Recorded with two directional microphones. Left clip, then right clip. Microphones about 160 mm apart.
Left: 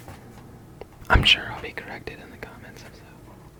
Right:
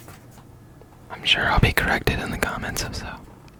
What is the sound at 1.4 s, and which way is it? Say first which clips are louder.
Speech: right 14 dB; 35° right (ahead or behind).